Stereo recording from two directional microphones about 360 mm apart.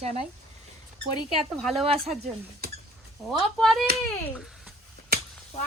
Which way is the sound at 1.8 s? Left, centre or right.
Centre.